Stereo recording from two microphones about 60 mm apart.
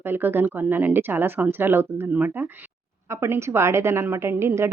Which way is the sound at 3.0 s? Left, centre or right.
Right.